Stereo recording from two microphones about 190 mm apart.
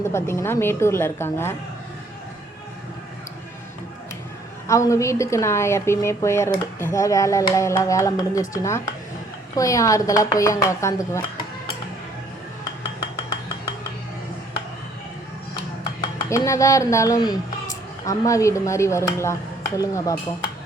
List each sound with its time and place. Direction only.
0.1 s a woman's voice: 15° left (ahead or behind)
4.7 s a woman's voice: 15° left (ahead or behind)
16.3 s a woman's voice: 15° left (ahead or behind)